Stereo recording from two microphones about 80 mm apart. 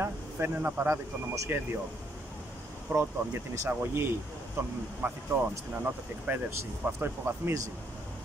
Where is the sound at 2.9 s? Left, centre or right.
Right.